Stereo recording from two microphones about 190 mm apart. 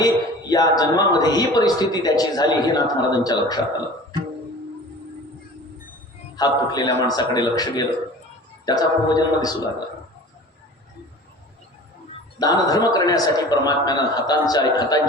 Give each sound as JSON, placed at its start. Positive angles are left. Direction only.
{"t": 0.0, "sound": "a man's voice", "side_deg": 20}
{"t": 6.3, "sound": "a man's voice", "side_deg": 20}
{"t": 12.4, "sound": "a man's voice", "side_deg": 20}